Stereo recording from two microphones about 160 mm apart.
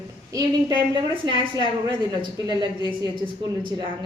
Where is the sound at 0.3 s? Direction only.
25° right (ahead or behind).